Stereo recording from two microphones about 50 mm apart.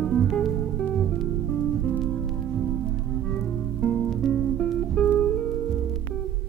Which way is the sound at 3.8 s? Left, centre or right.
Left.